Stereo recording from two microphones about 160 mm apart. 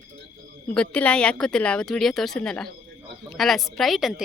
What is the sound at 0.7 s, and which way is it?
Speech, 5° left (ahead or behind).